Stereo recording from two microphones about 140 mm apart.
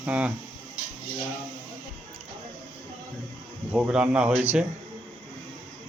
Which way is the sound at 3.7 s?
10° right (ahead or behind).